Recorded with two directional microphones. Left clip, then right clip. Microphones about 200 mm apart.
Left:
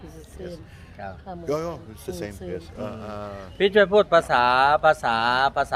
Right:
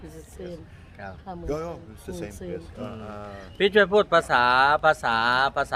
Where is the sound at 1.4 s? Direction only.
50° left (ahead or behind).